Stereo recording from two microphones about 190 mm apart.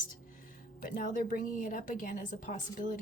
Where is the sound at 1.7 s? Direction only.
40° left (ahead or behind).